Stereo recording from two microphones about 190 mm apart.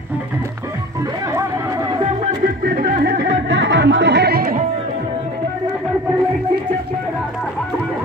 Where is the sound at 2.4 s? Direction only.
50° right (ahead or behind).